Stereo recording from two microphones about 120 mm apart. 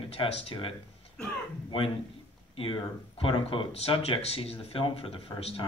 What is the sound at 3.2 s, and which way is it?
Speech, 50° left (ahead or behind).